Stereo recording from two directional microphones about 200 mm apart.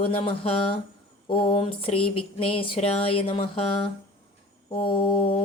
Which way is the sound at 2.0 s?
90° left.